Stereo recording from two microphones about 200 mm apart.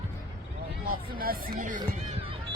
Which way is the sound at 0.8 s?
45° right (ahead or behind).